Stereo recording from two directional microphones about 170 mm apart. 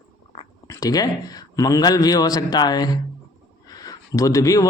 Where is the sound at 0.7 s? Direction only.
20° left (ahead or behind).